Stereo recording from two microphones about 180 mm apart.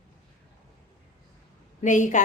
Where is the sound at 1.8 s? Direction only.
45° left (ahead or behind).